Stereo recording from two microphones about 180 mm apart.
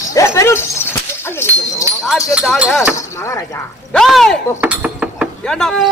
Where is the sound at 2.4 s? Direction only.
5° right (ahead or behind).